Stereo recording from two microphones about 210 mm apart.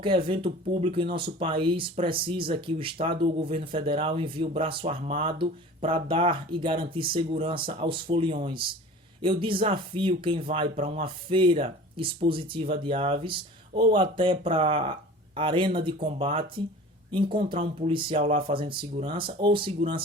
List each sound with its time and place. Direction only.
0.0 s speech: 25° right (ahead or behind)